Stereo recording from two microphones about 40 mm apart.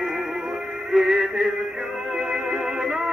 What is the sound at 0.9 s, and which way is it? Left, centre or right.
Music, centre.